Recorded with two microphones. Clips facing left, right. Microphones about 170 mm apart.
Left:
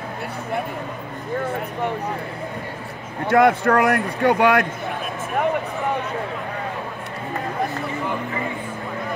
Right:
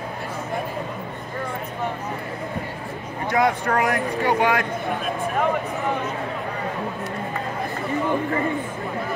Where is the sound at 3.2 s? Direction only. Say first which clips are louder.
Left 5 dB; 60° left (ahead or behind).